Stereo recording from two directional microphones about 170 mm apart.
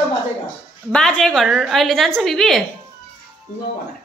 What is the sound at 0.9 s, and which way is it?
A woman's voice, 5° left (ahead or behind).